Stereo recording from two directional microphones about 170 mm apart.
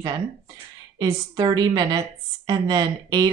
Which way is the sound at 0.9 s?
25° right (ahead or behind).